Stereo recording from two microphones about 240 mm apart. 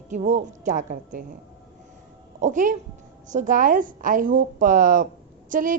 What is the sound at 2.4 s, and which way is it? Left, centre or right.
A woman's voice, right.